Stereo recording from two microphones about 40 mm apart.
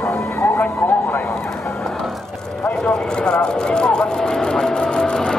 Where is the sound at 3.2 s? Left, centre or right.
Left.